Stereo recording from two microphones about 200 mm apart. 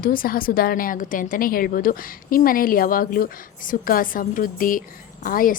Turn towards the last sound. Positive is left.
turn(degrees=45)  # may be behind; listen again after turning